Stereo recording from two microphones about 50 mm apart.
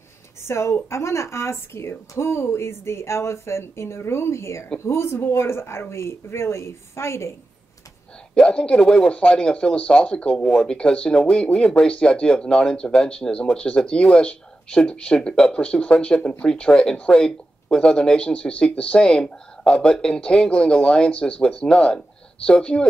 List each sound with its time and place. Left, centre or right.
0.4 s speech: left
4.7 s speech: left
8.4 s speech: centre
10.4 s speech: centre
10.7 s speech: centre